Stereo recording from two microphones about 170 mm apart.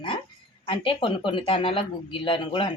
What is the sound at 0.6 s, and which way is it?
Speech, 30° left (ahead or behind).